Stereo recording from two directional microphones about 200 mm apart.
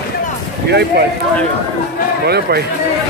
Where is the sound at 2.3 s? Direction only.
55° right (ahead or behind).